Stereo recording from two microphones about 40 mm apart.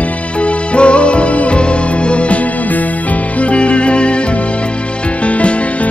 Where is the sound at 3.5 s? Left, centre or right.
Left.